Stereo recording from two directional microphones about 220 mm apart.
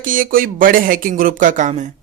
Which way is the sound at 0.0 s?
40° right (ahead or behind).